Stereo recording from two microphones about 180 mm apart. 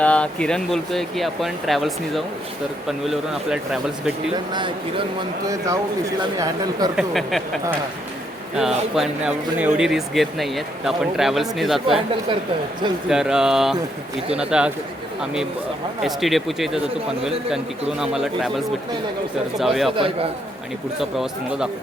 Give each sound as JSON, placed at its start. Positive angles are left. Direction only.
{"t": 0.0, "sound": "speech", "side_deg": 5}
{"t": 4.5, "sound": "speech", "side_deg": -25}
{"t": 6.9, "sound": "speech", "side_deg": 0}
{"t": 8.5, "sound": "speech", "side_deg": -5}
{"t": 13.1, "sound": "speech", "side_deg": -5}
{"t": 18.0, "sound": "speech", "side_deg": -5}
{"t": 21.0, "sound": "speech", "side_deg": 0}